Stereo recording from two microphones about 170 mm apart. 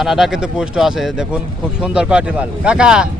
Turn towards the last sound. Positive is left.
turn(degrees=-5)  # may be behind; listen again after turning